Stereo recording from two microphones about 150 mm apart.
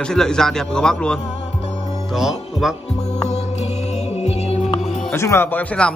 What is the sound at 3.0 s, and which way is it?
Music, 45° left (ahead or behind).